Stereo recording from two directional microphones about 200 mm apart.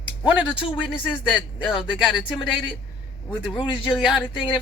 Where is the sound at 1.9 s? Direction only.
5° right (ahead or behind).